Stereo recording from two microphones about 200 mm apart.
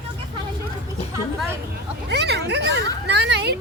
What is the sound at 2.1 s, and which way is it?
Speech, 55° right (ahead or behind).